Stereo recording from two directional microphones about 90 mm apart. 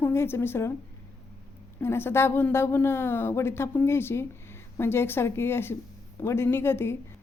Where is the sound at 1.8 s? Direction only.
25° left (ahead or behind).